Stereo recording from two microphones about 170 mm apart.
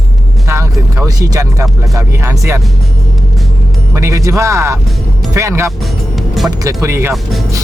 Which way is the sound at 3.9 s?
20° right (ahead or behind).